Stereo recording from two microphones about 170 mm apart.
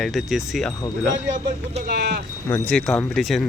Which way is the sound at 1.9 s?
75° right (ahead or behind).